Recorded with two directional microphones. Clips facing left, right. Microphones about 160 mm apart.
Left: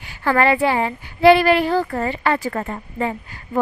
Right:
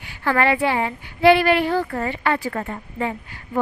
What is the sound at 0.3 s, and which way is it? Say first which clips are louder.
A woman's voice: left 2 dB; 35° left (ahead or behind).